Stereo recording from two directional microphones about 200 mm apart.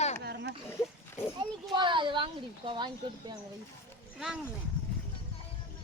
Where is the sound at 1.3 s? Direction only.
20° right (ahead or behind).